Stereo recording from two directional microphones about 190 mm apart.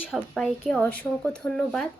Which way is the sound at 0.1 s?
Centre (ahead or behind).